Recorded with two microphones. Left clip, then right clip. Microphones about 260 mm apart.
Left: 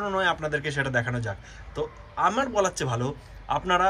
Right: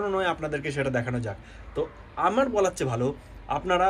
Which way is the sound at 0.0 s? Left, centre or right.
Centre.